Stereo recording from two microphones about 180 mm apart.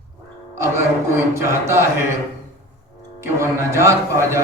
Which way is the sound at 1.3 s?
15° right (ahead or behind).